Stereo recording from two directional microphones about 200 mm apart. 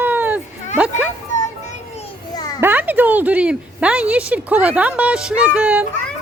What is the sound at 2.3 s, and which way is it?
Children playing, 20° left (ahead or behind).